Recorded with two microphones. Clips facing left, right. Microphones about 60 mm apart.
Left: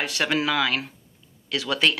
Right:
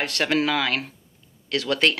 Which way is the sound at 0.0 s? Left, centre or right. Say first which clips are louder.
Right 2 dB; right.